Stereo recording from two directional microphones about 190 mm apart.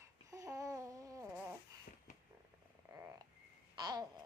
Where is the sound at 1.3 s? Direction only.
5° right (ahead or behind).